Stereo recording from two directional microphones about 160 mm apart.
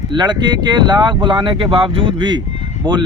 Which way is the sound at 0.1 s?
30° right (ahead or behind).